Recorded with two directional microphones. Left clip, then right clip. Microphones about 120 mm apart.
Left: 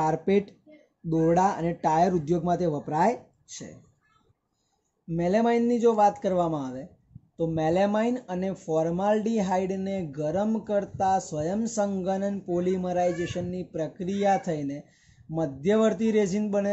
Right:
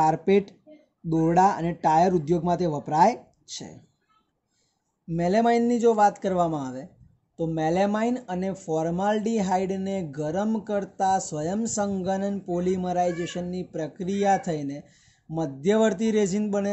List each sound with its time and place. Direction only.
0.0 s speech: 20° right (ahead or behind)
5.1 s speech: 25° right (ahead or behind)